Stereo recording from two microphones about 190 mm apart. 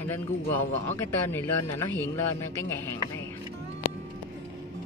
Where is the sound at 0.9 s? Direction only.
10° left (ahead or behind).